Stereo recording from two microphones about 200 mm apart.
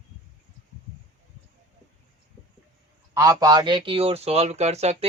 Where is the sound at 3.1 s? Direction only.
15° right (ahead or behind); by 4.9 s 30° right (ahead or behind).